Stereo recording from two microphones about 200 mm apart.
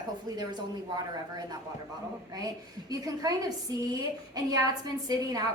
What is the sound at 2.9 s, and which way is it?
A woman's voice, 20° right (ahead or behind).